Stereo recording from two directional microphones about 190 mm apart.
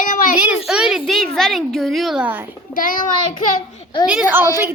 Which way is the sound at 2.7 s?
45° left (ahead or behind).